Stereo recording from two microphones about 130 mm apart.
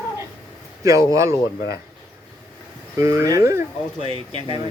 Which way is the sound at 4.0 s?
45° right (ahead or behind).